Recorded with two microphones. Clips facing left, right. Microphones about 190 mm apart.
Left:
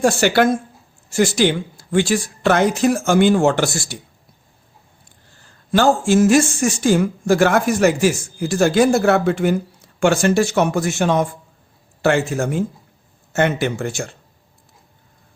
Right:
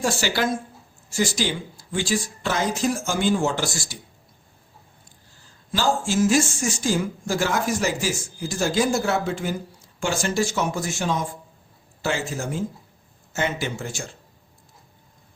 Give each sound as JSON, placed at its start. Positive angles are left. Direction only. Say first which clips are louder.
{"t": 0.0, "sound": "speech", "louder": "left 9 dB", "side_deg": 60}
{"t": 5.4, "sound": "speech", "louder": "left 9 dB", "side_deg": 60}